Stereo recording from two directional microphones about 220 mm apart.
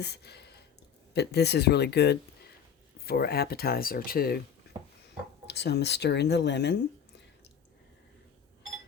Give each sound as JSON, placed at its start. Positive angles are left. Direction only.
{"t": 0.0, "sound": "a sound", "side_deg": 50}
{"t": 1.1, "sound": "speech", "side_deg": 50}
{"t": 5.5, "sound": "speech", "side_deg": 50}